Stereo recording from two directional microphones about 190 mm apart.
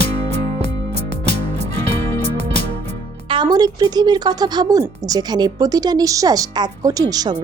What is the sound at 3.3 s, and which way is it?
Speech, 25° right (ahead or behind).